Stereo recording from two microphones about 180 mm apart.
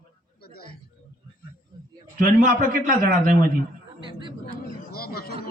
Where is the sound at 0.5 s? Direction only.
60° left (ahead or behind).